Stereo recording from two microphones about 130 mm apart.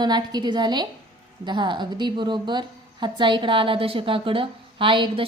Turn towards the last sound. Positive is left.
turn(degrees=-40)  # may be behind; listen again after turning